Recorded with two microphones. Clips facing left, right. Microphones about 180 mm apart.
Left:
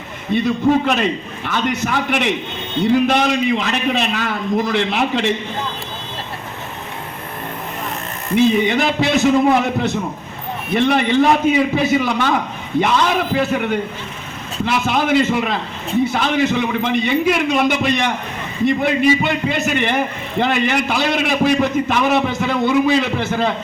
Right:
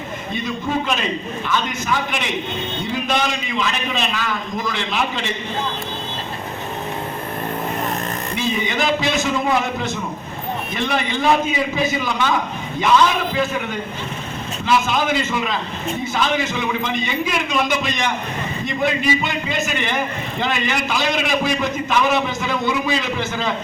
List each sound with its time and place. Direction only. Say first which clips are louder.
0.3 s a man's voice: left 8 dB; 65° left (ahead or behind)
8.4 s a man's voice: left 8 dB; 60° left (ahead or behind)